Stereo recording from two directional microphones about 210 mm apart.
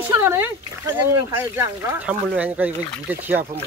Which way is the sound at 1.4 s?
10° right (ahead or behind).